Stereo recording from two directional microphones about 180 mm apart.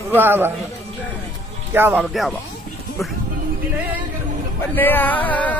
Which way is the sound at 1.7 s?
10° right (ahead or behind).